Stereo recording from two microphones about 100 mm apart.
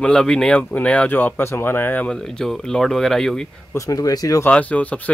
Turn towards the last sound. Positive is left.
turn(degrees=15)  # may be behind; listen again after turning